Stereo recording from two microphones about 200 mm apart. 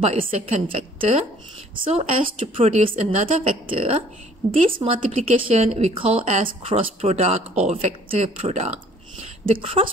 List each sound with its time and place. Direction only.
0.0 s a woman's voice: 35° right (ahead or behind)
1.9 s a woman's voice: 30° right (ahead or behind)